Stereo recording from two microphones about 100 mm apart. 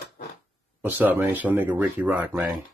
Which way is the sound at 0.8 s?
15° right (ahead or behind).